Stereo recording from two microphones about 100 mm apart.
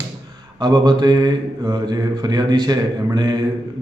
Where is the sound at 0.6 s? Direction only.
45° right (ahead or behind).